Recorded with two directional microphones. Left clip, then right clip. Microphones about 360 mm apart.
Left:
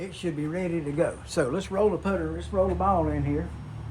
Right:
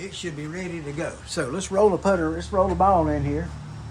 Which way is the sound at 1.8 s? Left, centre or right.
Right.